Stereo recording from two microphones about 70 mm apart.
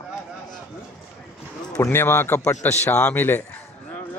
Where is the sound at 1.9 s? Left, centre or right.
Left.